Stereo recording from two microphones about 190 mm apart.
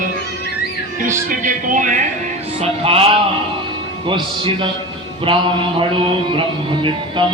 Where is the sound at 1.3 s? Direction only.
40° right (ahead or behind).